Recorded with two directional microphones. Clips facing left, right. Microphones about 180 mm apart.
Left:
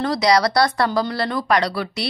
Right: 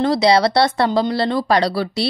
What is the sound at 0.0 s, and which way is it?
Speech, 25° right (ahead or behind).